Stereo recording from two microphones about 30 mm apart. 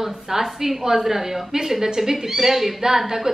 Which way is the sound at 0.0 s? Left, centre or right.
Centre.